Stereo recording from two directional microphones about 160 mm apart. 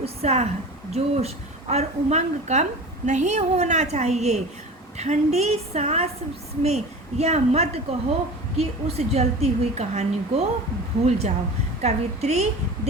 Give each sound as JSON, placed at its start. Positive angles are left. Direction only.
{"t": 0.0, "sound": "a woman's voice", "side_deg": -40}